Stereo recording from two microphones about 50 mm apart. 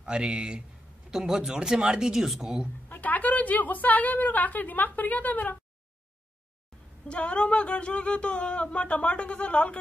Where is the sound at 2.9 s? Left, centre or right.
Left.